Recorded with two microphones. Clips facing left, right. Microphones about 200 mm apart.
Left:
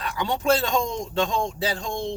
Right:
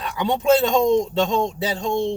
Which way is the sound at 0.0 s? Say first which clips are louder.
Right 4 dB; 20° right (ahead or behind).